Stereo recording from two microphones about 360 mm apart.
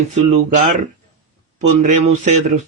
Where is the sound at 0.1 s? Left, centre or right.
Centre.